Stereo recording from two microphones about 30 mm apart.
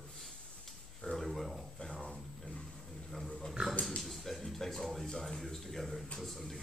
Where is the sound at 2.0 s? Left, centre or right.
Left.